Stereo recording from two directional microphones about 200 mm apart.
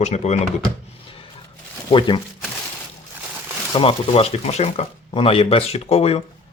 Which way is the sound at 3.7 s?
25° left (ahead or behind).